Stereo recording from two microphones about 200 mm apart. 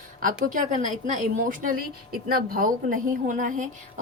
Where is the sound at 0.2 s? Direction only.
40° right (ahead or behind).